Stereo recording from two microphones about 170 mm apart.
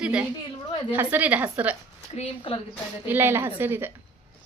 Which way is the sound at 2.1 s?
35° left (ahead or behind).